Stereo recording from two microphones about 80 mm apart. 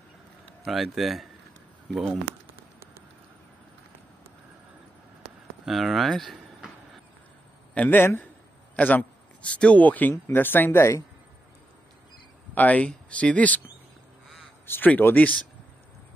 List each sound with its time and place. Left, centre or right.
0.7 s speech: centre
2.5 s a sound: right
5.7 s speech: centre
7.7 s a man's voice: centre
8.0 s speech: left
8.7 s speech: centre; by 11.1 s left
12.5 s speech: centre
14.7 s speech: left